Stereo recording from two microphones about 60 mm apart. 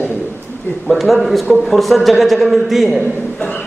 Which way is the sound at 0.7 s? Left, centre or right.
Left.